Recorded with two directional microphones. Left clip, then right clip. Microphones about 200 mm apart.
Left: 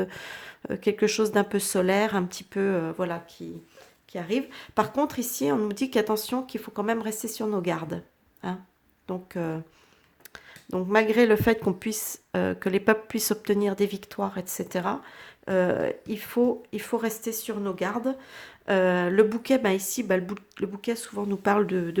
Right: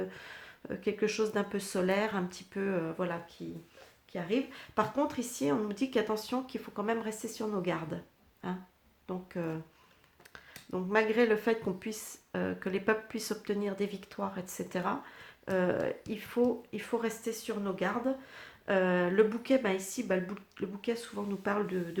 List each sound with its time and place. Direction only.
0.0 s speech: 45° left (ahead or behind)